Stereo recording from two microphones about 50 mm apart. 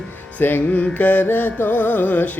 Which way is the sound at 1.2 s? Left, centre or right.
Left.